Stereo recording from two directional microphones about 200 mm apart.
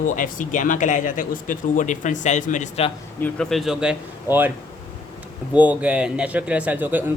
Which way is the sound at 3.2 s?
5° left (ahead or behind).